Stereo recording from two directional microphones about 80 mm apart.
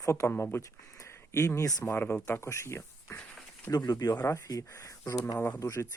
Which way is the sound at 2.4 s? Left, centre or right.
Left.